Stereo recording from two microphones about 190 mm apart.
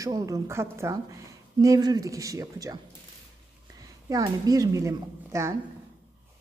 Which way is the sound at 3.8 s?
20° right (ahead or behind).